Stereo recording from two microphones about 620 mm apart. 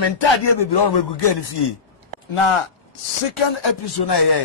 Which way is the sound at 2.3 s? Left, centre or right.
Left.